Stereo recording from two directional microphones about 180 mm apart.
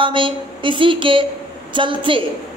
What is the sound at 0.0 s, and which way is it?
A woman's voice, 30° right (ahead or behind).